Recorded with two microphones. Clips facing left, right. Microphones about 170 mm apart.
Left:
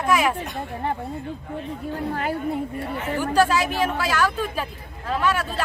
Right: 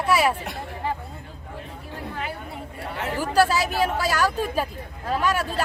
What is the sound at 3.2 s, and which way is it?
Speech, 35° right (ahead or behind).